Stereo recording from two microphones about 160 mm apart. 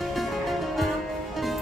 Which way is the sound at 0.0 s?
Centre (ahead or behind).